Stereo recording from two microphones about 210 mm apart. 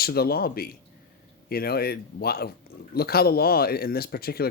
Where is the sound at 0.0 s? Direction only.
45° left (ahead or behind).